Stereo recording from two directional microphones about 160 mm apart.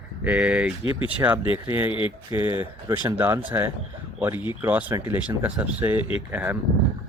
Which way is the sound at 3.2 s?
15° right (ahead or behind).